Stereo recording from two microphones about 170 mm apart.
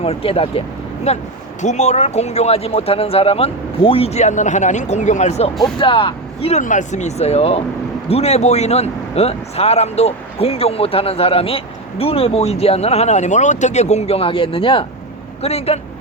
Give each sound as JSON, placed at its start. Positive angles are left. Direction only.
{"t": 0.0, "sound": "speech", "side_deg": 35}
{"t": 5.6, "sound": "speech", "side_deg": 30}
{"t": 6.6, "sound": "speech", "side_deg": 50}